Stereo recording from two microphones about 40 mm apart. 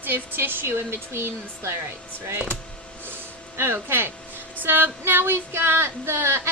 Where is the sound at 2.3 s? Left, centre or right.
Right.